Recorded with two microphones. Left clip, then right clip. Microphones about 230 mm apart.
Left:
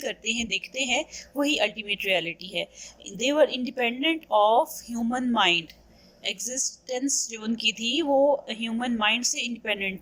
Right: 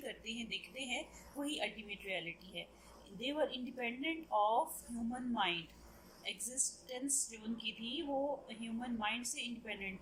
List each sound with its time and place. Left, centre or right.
0.0 s a woman's voice: left